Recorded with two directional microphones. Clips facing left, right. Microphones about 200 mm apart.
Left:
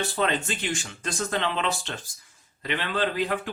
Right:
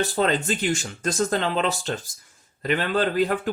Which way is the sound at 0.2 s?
40° right (ahead or behind).